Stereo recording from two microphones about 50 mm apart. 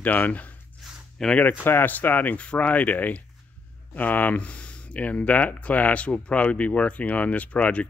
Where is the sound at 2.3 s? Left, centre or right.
Left.